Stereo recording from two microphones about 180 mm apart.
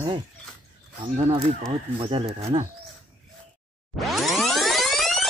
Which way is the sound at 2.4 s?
35° right (ahead or behind).